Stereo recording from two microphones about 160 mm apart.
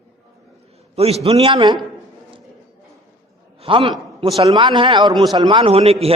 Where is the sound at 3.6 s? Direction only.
35° right (ahead or behind).